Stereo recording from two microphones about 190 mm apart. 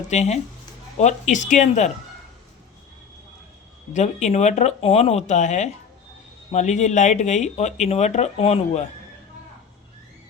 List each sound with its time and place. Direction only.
0.1 s speech: 35° left (ahead or behind)
3.9 s speech: 40° left (ahead or behind)